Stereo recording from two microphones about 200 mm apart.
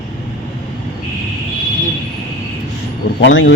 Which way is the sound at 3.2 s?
65° left (ahead or behind).